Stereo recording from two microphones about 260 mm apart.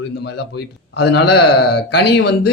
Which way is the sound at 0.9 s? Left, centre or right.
Left.